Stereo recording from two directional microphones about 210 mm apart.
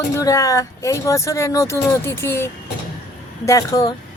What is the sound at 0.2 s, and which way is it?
Speech, 15° left (ahead or behind).